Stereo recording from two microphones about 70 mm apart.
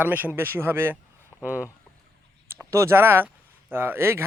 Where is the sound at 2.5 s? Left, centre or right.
Right.